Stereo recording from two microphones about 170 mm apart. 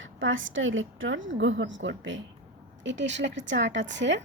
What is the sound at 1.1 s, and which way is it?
A woman's voice, 90° right.